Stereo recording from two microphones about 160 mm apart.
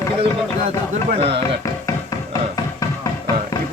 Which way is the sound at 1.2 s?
40° right (ahead or behind).